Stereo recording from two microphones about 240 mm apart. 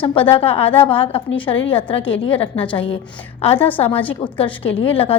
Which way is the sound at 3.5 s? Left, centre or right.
Centre.